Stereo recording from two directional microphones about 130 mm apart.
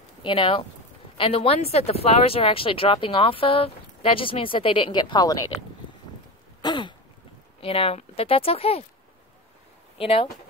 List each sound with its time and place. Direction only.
0.2 s speech: 40° left (ahead or behind)
6.6 s throat clearing: 35° left (ahead or behind)
7.6 s speech: 45° left (ahead or behind)
9.9 s speech: 45° left (ahead or behind)